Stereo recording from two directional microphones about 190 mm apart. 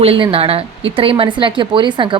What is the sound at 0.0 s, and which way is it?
A woman's voice, 30° right (ahead or behind).